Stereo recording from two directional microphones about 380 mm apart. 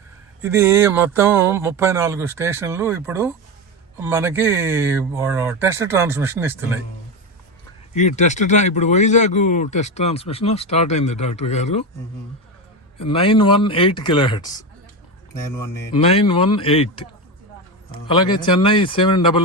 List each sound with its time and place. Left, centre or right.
0.4 s speech: centre
7.9 s speech: centre
13.0 s speech: centre
15.9 s speech: centre